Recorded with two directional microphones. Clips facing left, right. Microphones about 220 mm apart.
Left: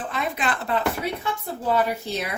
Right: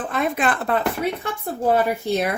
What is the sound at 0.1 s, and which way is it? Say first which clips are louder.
Speech: right 6 dB; 50° right (ahead or behind).